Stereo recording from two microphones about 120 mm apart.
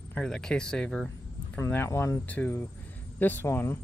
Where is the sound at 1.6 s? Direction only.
20° left (ahead or behind).